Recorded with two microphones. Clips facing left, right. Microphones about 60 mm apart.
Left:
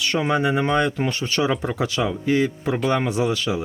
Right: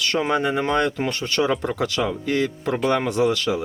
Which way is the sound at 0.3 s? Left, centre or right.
Centre.